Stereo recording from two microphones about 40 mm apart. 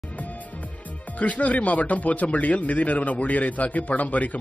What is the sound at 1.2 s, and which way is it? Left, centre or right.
Speech, left.